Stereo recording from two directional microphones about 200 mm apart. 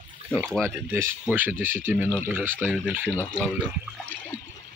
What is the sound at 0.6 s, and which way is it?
Speech, 15° right (ahead or behind).